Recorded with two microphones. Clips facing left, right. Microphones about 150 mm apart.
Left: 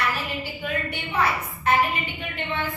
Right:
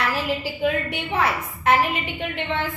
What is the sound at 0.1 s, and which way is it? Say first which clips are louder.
A woman's voice: right 5 dB; 90° right.